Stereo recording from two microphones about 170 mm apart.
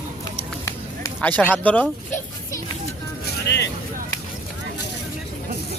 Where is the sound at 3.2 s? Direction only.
85° left.